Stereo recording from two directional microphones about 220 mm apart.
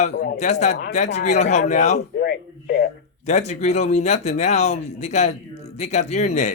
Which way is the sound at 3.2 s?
30° left (ahead or behind).